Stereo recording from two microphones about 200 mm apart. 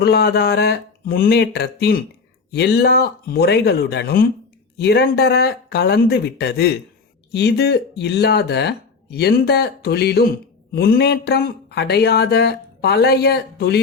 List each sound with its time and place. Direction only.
0.0 s speech: 55° left (ahead or behind)